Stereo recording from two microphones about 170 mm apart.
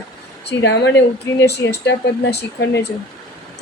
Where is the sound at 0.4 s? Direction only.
85° left.